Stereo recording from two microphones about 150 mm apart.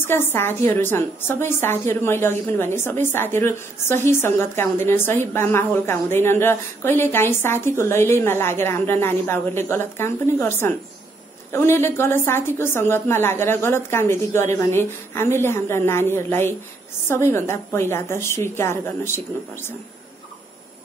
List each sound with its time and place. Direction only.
0.3 s a woman's voice: 15° left (ahead or behind)